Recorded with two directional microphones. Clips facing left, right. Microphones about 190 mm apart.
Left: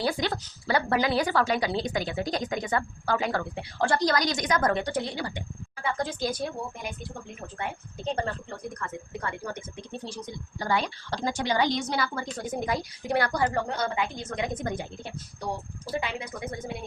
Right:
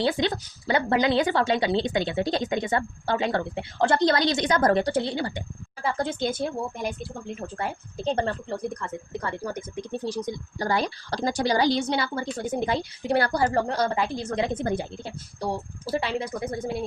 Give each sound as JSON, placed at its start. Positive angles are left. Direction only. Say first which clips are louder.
{"t": 0.0, "sound": "a woman's voice", "louder": "right 4 dB", "side_deg": -25}